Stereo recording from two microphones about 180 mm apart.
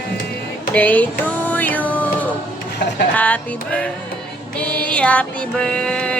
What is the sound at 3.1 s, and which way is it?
Music, 10° left (ahead or behind).